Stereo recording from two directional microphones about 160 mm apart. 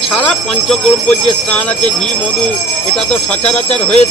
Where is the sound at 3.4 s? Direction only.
45° left (ahead or behind).